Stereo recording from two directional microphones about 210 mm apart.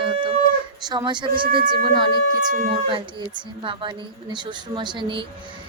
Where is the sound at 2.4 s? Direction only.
40° right (ahead or behind).